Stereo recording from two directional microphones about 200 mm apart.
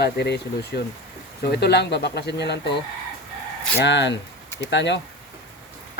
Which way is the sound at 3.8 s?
60° left (ahead or behind).